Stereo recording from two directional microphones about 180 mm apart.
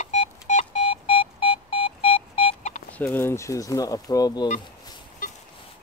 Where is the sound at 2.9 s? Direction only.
10° left (ahead or behind).